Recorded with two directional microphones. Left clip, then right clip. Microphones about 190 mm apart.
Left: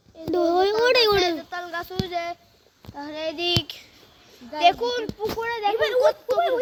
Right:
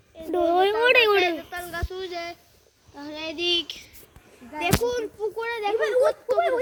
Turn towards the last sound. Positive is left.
turn(degrees=50)  # may be behind; listen again after turning